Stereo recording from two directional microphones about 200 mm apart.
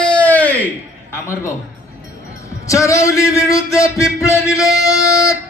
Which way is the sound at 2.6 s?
15° left (ahead or behind).